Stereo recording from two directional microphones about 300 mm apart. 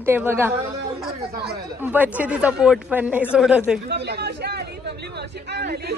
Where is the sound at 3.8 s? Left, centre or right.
Right.